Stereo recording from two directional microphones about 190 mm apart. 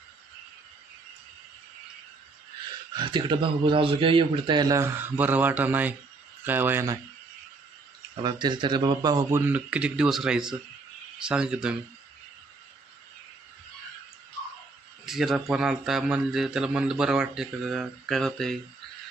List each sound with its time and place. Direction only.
2.9 s a man's voice: 25° right (ahead or behind)
8.1 s a man's voice: 25° right (ahead or behind); by 11.7 s 5° right (ahead or behind)
15.0 s a man's voice: centre (ahead or behind)